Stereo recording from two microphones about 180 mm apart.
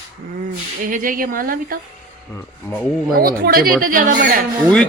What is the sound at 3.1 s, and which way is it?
Speech, 55° right (ahead or behind).